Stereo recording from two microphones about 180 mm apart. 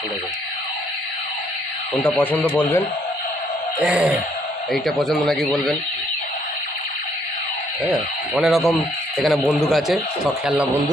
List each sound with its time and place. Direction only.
2.0 s speech: 10° left (ahead or behind)
3.8 s speech: 5° right (ahead or behind)
7.9 s speech: centre (ahead or behind)